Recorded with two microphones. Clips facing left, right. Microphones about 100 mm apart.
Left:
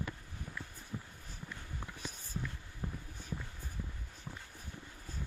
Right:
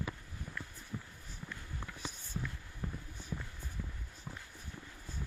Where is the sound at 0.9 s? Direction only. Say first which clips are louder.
Even; 10° left (ahead or behind).